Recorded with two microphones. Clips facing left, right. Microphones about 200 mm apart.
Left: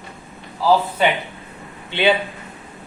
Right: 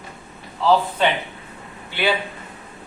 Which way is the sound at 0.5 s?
5° left (ahead or behind).